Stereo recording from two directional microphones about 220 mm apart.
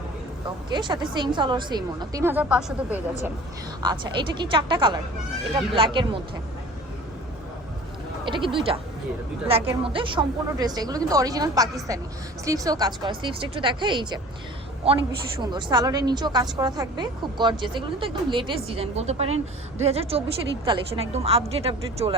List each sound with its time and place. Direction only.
0.4 s a woman's voice: 20° right (ahead or behind); by 3.0 s 5° right (ahead or behind)
3.8 s a woman's voice: 20° right (ahead or behind)
8.2 s speech: 20° right (ahead or behind)
9.5 s a woman's voice: 25° right (ahead or behind)